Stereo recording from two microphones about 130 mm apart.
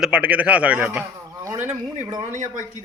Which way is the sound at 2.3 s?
70° right (ahead or behind).